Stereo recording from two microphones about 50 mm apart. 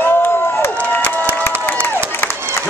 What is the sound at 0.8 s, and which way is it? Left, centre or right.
Crowd, left.